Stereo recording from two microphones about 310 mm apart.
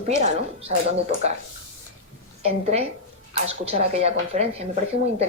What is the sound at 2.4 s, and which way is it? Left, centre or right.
A woman's voice, centre.